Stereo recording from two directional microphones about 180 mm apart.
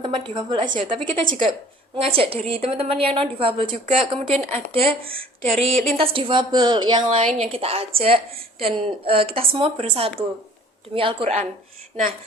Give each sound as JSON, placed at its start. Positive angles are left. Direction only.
{"t": 0.0, "sound": "a woman's voice", "side_deg": -25}
{"t": 4.3, "sound": "a woman's voice", "side_deg": -40}